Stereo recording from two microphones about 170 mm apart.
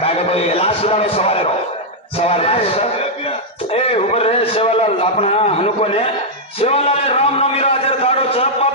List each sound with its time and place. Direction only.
0.0 s a man's voice: 35° left (ahead or behind)